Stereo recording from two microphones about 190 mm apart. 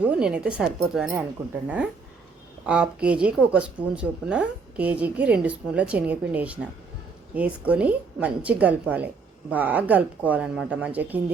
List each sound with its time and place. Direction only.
0.0 s speech: 5° right (ahead or behind)